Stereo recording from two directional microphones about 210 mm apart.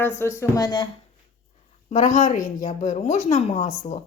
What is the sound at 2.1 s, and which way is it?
A woman's voice, 35° left (ahead or behind).